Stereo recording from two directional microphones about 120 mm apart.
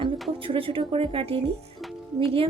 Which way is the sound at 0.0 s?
45° right (ahead or behind).